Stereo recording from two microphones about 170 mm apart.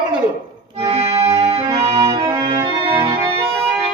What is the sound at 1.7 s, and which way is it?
Music, 35° right (ahead or behind).